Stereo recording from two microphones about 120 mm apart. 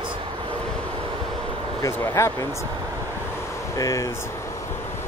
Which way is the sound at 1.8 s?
25° left (ahead or behind).